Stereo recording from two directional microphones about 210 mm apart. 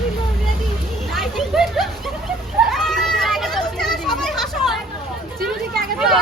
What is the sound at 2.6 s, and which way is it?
Children playing, centre (ahead or behind).